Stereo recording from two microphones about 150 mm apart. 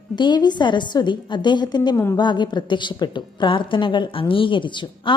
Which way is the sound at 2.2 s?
30° left (ahead or behind).